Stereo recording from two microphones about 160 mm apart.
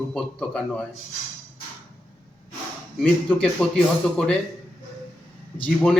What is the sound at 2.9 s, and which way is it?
A man's voice, 5° left (ahead or behind).